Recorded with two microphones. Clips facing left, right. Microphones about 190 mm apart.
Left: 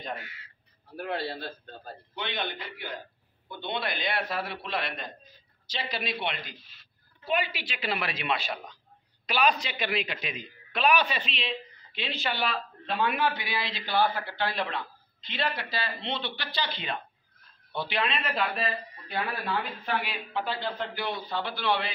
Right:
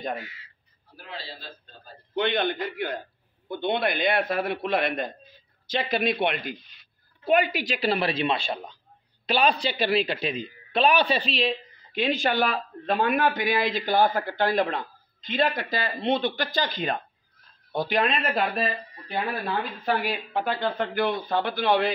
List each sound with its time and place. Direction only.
0.9 s a man's voice: 60° left (ahead or behind)
2.1 s a man's voice: 55° right (ahead or behind)
6.6 s speech: 5° left (ahead or behind)
7.2 s a woman's voice: 50° right (ahead or behind)